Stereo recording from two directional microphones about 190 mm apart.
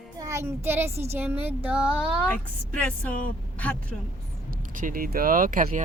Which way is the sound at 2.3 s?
5° left (ahead or behind).